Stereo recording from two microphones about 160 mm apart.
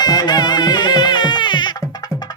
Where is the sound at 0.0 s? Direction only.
25° left (ahead or behind).